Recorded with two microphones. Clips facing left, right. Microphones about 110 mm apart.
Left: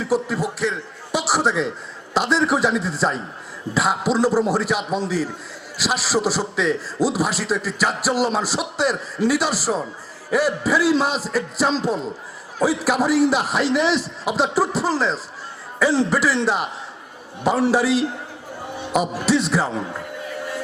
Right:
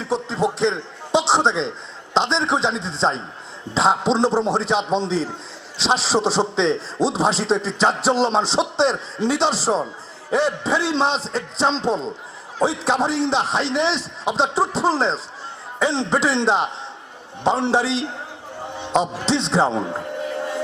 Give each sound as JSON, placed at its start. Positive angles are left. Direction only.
{"t": 0.0, "sound": "a man's voice", "side_deg": -25}
{"t": 18.8, "sound": "music", "side_deg": -25}
{"t": 19.1, "sound": "a man's voice", "side_deg": -25}